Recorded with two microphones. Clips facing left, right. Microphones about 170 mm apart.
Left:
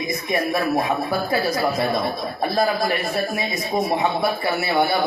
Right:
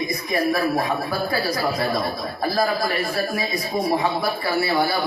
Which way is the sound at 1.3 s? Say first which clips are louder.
Left 3 dB; 25° left (ahead or behind).